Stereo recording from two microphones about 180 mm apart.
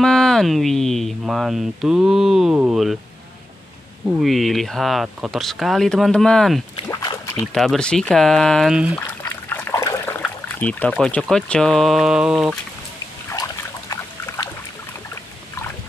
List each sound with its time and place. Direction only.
0.0 s speech: 5° left (ahead or behind)
4.2 s speech: centre (ahead or behind)
6.9 s boat: 20° left (ahead or behind)
7.5 s speech: centre (ahead or behind)
9.0 s water: 10° left (ahead or behind)
10.5 s speech: 10° left (ahead or behind)
13.3 s trickle: 15° left (ahead or behind)